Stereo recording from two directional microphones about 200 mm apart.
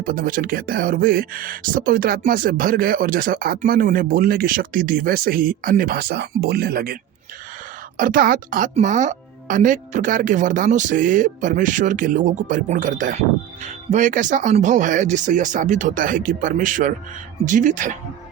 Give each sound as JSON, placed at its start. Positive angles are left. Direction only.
{"t": 0.0, "sound": "speech", "side_deg": -45}
{"t": 7.9, "sound": "speech", "side_deg": -45}